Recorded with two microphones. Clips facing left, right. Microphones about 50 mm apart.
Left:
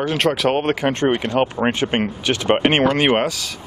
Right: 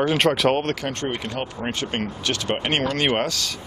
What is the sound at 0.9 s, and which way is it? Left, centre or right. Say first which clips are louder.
Speech: left 9 dB; left.